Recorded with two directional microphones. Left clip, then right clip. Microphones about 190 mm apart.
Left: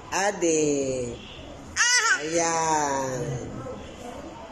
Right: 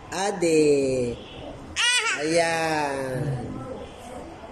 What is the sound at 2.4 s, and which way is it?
Speech, 10° right (ahead or behind).